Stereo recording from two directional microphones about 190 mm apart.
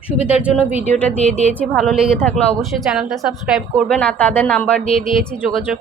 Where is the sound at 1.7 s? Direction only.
5° left (ahead or behind).